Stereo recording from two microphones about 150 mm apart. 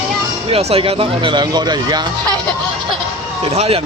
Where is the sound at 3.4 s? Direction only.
40° right (ahead or behind).